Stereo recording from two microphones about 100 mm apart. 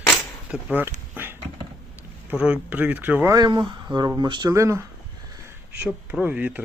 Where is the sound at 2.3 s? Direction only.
10° right (ahead or behind).